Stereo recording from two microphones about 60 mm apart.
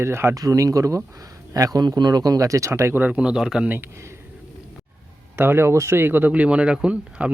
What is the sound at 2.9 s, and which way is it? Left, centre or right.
Speech, right.